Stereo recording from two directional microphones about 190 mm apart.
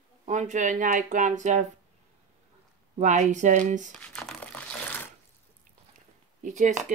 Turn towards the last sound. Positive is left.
turn(degrees=-40)  # may be behind; listen again after turning